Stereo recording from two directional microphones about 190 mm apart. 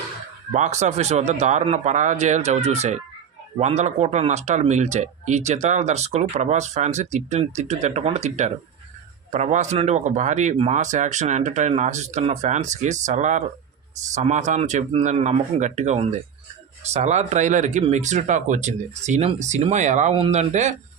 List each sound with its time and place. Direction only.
0.5 s speech: 40° right (ahead or behind)